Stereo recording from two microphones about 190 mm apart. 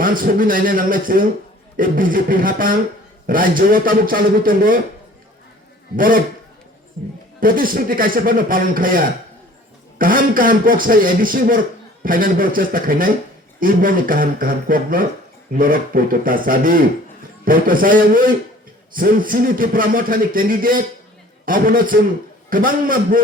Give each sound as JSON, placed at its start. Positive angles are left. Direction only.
{"t": 0.0, "sound": "speech", "side_deg": -45}
{"t": 6.0, "sound": "speech", "side_deg": -45}
{"t": 7.3, "sound": "speech", "side_deg": -45}
{"t": 10.0, "sound": "speech", "side_deg": -45}